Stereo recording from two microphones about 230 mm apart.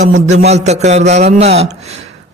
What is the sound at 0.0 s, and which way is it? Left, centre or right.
Speech, right.